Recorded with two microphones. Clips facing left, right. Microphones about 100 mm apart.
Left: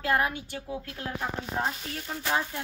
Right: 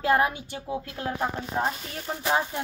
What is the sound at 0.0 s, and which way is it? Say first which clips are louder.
A woman's voice: right 4 dB; 20° right (ahead or behind).